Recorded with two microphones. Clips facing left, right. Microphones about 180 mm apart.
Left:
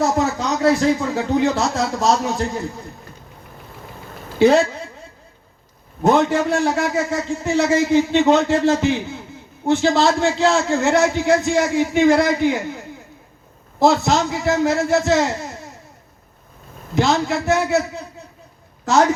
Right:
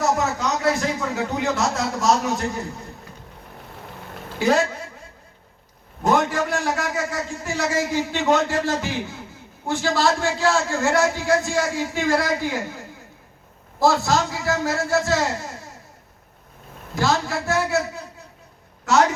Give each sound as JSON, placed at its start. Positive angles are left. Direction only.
{"t": 0.0, "sound": "speech", "side_deg": 30}
{"t": 4.4, "sound": "a woman's voice", "side_deg": 25}
{"t": 6.0, "sound": "a man's voice", "side_deg": 25}
{"t": 13.7, "sound": "a man's voice", "side_deg": 20}
{"t": 16.9, "sound": "a man's voice", "side_deg": 20}